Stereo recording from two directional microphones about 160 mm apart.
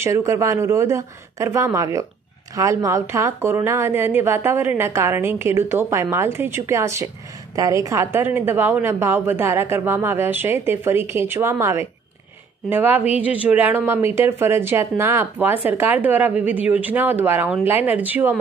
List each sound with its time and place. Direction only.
0.0 s a woman's voice: 20° right (ahead or behind)